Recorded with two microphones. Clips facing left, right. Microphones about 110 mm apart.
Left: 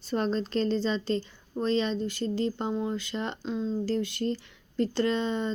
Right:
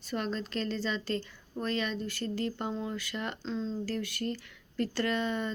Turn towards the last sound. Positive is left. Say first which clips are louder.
# left 4 dB
turn(degrees=25)  # may be behind; listen again after turning